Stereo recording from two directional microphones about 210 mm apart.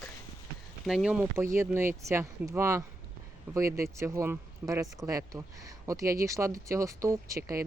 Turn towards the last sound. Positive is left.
turn(degrees=-15)  # may be behind; listen again after turning